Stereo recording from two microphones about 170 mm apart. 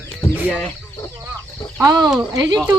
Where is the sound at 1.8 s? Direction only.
20° right (ahead or behind).